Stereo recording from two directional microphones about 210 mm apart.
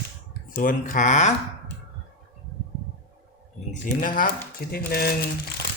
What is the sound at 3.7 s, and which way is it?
Speech, 40° left (ahead or behind).